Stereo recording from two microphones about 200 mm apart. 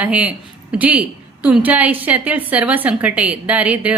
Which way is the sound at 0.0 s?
5° right (ahead or behind).